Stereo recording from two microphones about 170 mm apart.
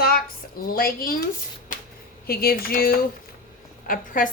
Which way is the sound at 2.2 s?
65° left (ahead or behind).